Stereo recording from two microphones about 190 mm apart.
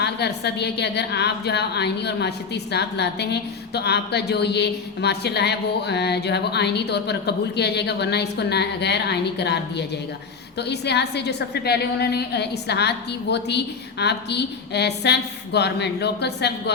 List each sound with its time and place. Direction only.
0.0 s a woman's voice: 60° left (ahead or behind)